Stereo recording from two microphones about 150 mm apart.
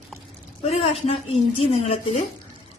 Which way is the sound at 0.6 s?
40° left (ahead or behind).